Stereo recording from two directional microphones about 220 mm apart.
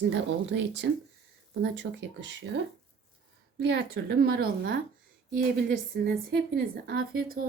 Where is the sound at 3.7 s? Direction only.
50° right (ahead or behind).